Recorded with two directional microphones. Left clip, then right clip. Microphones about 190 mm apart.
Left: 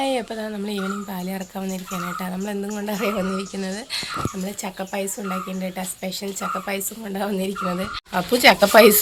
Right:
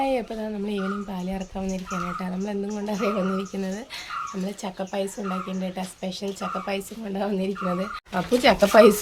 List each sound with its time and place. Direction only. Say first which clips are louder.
0.0 s speech: left 1 dB; 5° left (ahead or behind)
4.4 s speech: left 2 dB; 20° left (ahead or behind)
6.2 s speech: left 2 dB; 10° left (ahead or behind)